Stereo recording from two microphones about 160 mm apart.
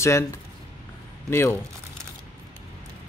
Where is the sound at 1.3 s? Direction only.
15° left (ahead or behind).